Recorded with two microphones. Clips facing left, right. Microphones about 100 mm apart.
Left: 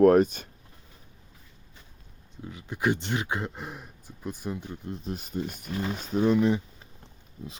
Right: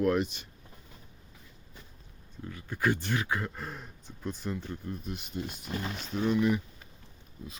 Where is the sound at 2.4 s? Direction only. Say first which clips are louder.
Left 2 dB; 20° left (ahead or behind).